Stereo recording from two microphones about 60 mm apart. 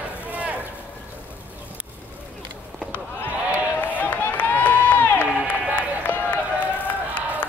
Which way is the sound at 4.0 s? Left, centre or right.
Left.